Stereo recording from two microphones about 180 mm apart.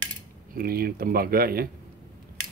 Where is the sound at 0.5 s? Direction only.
55° right (ahead or behind).